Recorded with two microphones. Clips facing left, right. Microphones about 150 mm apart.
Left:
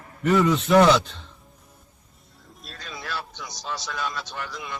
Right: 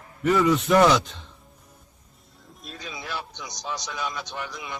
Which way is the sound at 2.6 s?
15° right (ahead or behind).